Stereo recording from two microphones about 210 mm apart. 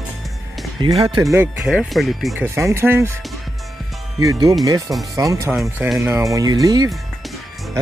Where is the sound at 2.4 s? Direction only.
10° right (ahead or behind).